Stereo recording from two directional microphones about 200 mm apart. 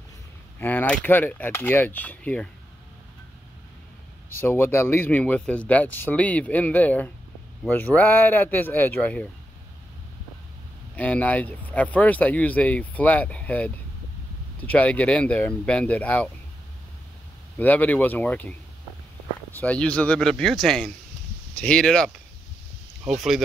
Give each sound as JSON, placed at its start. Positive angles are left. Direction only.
{"t": 0.6, "sound": "speech", "side_deg": 10}
{"t": 4.4, "sound": "speech", "side_deg": 10}
{"t": 11.0, "sound": "speech", "side_deg": 5}
{"t": 17.6, "sound": "speech", "side_deg": 10}